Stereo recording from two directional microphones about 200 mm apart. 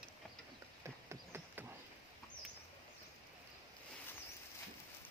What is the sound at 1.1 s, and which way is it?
Clip-clop, 10° right (ahead or behind).